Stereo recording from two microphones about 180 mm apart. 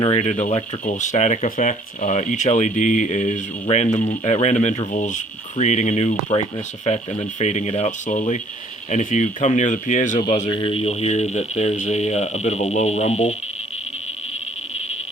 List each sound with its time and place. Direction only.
0.0 s speech: 35° left (ahead or behind)
10.5 s speech: 30° left (ahead or behind)